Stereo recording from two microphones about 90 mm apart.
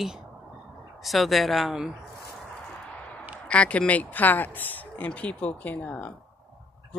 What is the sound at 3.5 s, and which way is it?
Speech, 15° left (ahead or behind).